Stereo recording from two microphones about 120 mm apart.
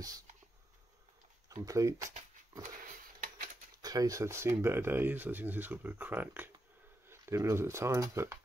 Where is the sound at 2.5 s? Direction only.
30° right (ahead or behind).